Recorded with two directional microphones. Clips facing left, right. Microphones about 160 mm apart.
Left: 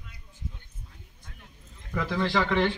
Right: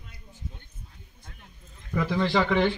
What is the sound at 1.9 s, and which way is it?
Speech, 15° right (ahead or behind).